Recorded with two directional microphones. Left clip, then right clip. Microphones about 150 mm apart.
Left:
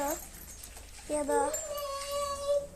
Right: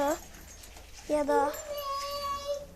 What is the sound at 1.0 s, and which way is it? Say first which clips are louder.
Child singing: right 3 dB; 20° right (ahead or behind).